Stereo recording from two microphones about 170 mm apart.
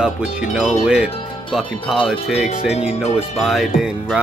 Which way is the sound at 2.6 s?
40° left (ahead or behind).